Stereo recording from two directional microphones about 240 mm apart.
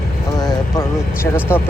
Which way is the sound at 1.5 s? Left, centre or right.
Centre.